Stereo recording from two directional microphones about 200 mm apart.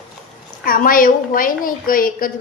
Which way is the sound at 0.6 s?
45° left (ahead or behind).